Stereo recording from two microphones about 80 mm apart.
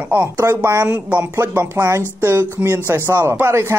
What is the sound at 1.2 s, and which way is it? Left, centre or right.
A man's voice, right.